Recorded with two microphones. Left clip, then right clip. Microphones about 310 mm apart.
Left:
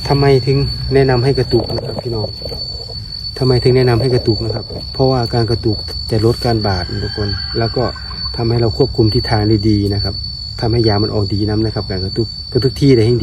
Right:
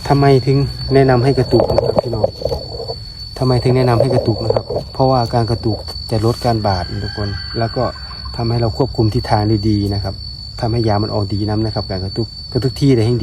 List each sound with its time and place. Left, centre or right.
0.1 s speech: right
3.4 s speech: centre